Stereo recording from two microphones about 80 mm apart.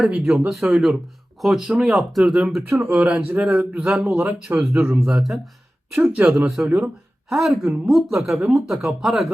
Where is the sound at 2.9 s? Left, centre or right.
Centre.